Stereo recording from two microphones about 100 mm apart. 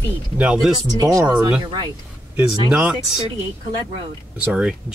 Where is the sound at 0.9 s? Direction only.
40° right (ahead or behind).